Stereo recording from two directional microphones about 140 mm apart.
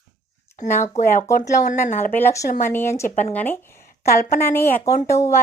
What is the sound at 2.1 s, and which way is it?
A woman's voice, 20° left (ahead or behind).